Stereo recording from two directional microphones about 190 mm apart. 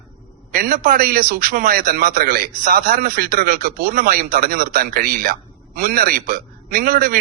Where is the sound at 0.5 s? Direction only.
45° right (ahead or behind).